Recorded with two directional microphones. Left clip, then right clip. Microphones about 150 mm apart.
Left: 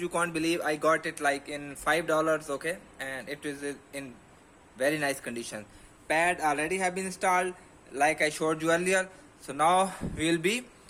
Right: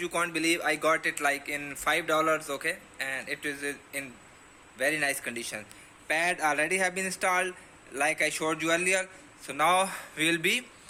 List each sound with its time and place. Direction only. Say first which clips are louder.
0.0 s speech: right 1 dB; 40° left (ahead or behind)
1.1 s speech: right 1 dB; 25° left (ahead or behind); by 5.6 s 45° left (ahead or behind)
6.1 s speech: left 2 dB; 25° left (ahead or behind)
6.3 s speech: right 2 dB; 15° left (ahead or behind)
8.2 s speech: left 1 dB; 45° left (ahead or behind)
9.6 s speech: left 1 dB; 30° left (ahead or behind)